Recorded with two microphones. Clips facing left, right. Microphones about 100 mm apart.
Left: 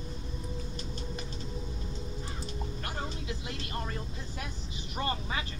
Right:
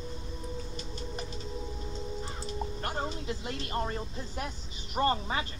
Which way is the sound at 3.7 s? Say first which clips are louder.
Right 6 dB; 30° right (ahead or behind).